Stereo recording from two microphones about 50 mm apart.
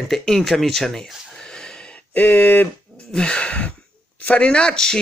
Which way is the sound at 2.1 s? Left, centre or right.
Left.